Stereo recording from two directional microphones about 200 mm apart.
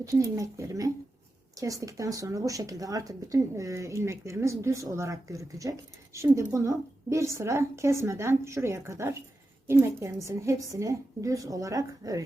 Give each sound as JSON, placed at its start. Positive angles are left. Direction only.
{"t": 0.0, "sound": "speech", "side_deg": -15}